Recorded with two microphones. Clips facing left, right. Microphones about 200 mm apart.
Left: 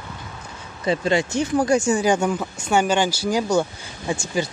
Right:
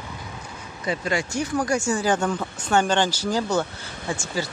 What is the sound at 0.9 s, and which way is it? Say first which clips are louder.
Speech: left 5 dB; 25° left (ahead or behind).